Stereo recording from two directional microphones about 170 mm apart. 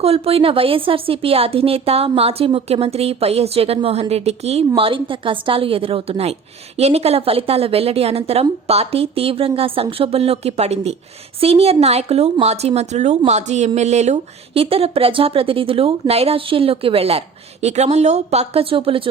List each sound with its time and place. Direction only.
0.0 s speech: 35° right (ahead or behind)